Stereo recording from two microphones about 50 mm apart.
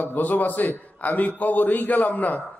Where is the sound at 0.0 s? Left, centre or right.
Left.